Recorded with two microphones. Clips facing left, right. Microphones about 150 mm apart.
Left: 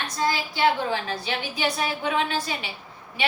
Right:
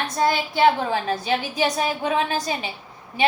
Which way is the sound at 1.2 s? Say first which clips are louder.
Right 5 dB; 40° right (ahead or behind).